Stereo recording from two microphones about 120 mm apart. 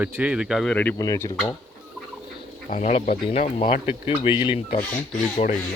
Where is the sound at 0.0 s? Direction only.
10° right (ahead or behind).